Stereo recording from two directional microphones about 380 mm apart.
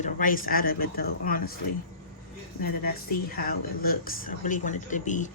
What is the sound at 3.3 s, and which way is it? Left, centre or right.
Speech, left.